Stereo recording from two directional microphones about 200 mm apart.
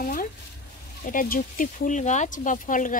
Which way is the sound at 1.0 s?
45° left (ahead or behind).